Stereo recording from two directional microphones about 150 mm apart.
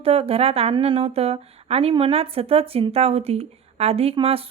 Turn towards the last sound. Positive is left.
turn(degrees=-40)  # may be behind; listen again after turning